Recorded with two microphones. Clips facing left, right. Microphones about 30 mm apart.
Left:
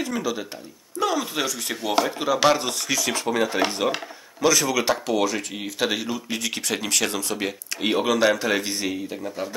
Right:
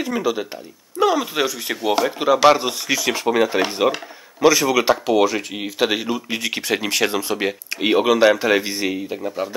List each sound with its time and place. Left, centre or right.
0.0 s speech: centre